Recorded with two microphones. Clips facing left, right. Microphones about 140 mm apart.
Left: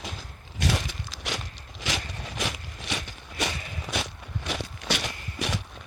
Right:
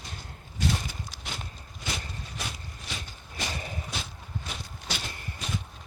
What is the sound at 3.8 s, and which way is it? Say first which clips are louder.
Walk: left 6 dB; 80° left.